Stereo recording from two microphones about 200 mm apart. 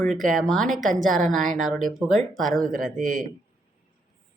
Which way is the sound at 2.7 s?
40° right (ahead or behind).